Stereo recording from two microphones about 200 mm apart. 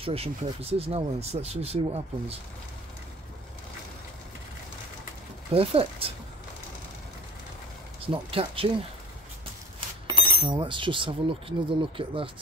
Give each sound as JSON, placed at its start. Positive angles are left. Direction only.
{"t": 0.0, "sound": "speech", "side_deg": -30}
{"t": 5.5, "sound": "speech", "side_deg": -30}
{"t": 8.1, "sound": "speech", "side_deg": -25}
{"t": 9.8, "sound": "speech", "side_deg": -20}